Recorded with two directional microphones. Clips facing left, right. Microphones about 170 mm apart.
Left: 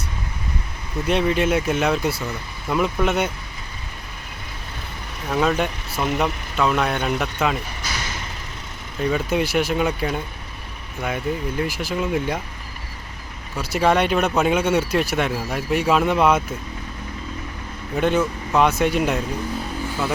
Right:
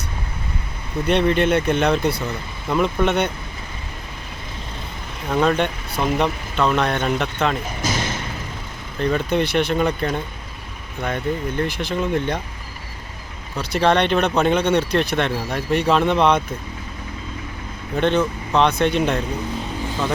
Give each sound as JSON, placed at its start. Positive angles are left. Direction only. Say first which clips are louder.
{"t": 1.0, "sound": "speech", "louder": "right 2 dB", "side_deg": 5}
{"t": 5.3, "sound": "speech", "louder": "right 2 dB", "side_deg": 5}
{"t": 7.8, "sound": "vehicle", "louder": "right 7 dB", "side_deg": -45}
{"t": 9.0, "sound": "speech", "louder": "right 1 dB", "side_deg": 5}
{"t": 13.6, "sound": "speech", "louder": "right 1 dB", "side_deg": 5}
{"t": 17.9, "sound": "speech", "louder": "right 1 dB", "side_deg": 5}